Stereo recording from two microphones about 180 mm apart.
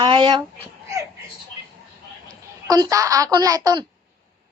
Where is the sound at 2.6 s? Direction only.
20° right (ahead or behind).